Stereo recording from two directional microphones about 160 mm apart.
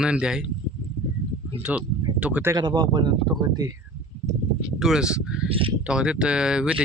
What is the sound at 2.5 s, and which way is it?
Speech, 25° right (ahead or behind).